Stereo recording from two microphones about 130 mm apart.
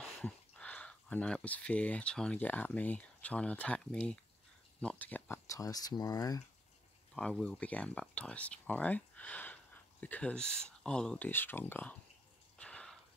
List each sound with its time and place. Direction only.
0.2 s speech: 10° left (ahead or behind)
5.5 s speech: 25° left (ahead or behind)
7.2 s speech: 5° left (ahead or behind)
12.5 s a sound: 10° left (ahead or behind)